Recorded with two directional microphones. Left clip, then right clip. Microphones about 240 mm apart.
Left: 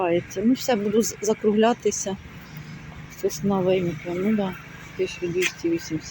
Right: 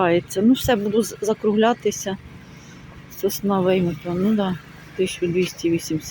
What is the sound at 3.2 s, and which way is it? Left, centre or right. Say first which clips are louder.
Speech: right 3 dB; centre.